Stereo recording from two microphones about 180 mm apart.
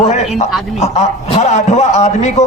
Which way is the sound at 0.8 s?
40° left (ahead or behind).